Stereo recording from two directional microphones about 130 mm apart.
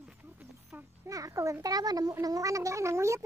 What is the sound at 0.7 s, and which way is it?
A child's voice, 25° right (ahead or behind).